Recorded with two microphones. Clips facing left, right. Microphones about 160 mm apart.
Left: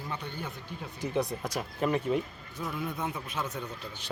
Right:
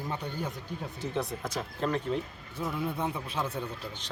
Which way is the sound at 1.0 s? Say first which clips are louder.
Left 3 dB; 10° left (ahead or behind).